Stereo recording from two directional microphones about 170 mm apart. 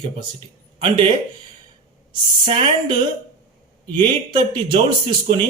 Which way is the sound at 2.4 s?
35° right (ahead or behind).